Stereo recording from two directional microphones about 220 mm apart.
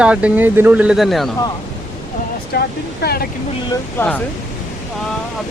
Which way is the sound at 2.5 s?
45° left (ahead or behind).